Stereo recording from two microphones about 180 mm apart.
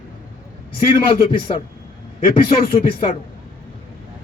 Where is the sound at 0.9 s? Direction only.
30° left (ahead or behind).